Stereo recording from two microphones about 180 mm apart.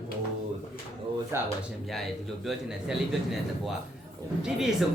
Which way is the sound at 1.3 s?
15° right (ahead or behind).